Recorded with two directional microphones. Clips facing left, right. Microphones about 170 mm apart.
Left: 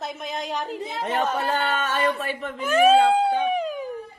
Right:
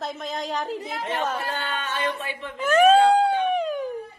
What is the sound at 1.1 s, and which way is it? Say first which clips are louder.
Speech: left 4 dB; 55° left (ahead or behind).